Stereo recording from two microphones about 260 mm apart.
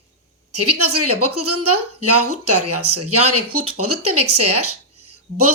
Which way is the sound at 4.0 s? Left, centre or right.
Right.